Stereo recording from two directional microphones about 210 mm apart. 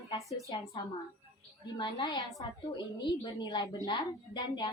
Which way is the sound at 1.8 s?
20° left (ahead or behind).